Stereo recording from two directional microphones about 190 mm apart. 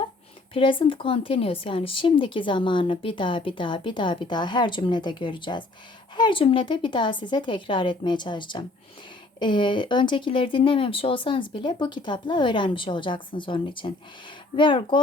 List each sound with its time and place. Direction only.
0.5 s speech: 30° left (ahead or behind)